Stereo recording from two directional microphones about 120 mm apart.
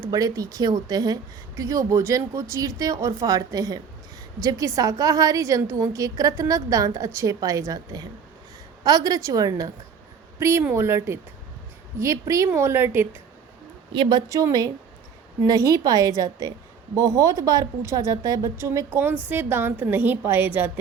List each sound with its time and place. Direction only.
0.0 s a woman's voice: 30° right (ahead or behind)
10.6 s speech: 20° right (ahead or behind)
13.9 s a woman's voice: 40° right (ahead or behind); by 20.7 s 15° right (ahead or behind)